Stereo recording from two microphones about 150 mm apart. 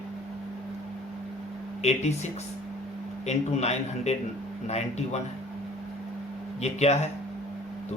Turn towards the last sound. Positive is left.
turn(degrees=45)  # may be behind; listen again after turning